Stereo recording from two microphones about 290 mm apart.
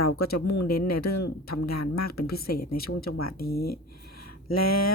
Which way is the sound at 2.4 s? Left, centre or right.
Left.